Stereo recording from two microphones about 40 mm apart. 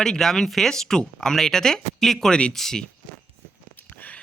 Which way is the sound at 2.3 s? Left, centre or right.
Left.